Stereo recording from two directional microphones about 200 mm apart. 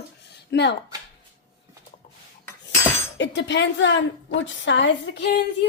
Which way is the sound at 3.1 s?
60° left (ahead or behind).